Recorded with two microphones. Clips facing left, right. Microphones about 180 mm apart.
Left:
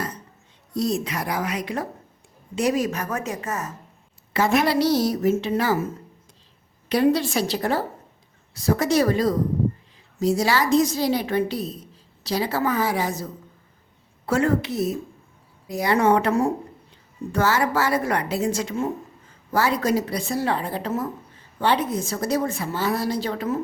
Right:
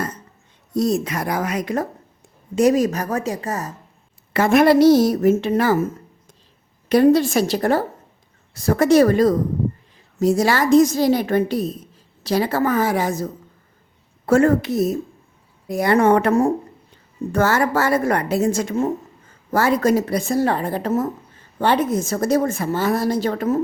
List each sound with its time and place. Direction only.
0.7 s a woman's voice: 45° right (ahead or behind)
4.4 s a woman's voice: 50° right (ahead or behind)